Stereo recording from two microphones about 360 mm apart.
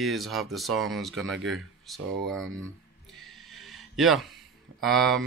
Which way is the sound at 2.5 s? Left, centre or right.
Right.